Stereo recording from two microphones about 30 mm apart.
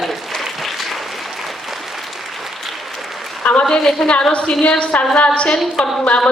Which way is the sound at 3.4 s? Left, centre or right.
Left.